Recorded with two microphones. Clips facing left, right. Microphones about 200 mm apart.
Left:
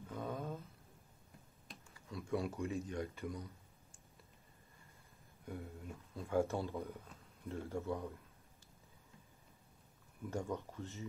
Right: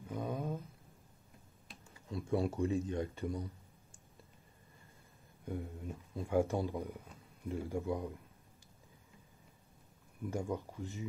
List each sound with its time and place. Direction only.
0.1 s a sound: 15° right (ahead or behind)
1.7 s computer keyboard: centre (ahead or behind)
2.0 s speech: 30° right (ahead or behind)
5.5 s speech: 15° right (ahead or behind)
10.3 s speech: 15° right (ahead or behind)